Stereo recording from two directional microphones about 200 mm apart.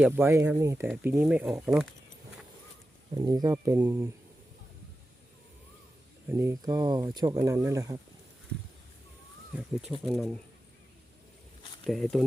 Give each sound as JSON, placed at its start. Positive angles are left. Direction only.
{"t": 0.2, "sound": "speech", "side_deg": -15}
{"t": 3.2, "sound": "speech", "side_deg": -20}
{"t": 6.2, "sound": "speech", "side_deg": -15}
{"t": 10.1, "sound": "speech", "side_deg": 0}
{"t": 11.9, "sound": "speech", "side_deg": 0}